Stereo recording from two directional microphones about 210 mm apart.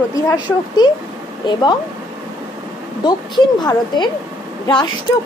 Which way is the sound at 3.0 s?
20° left (ahead or behind).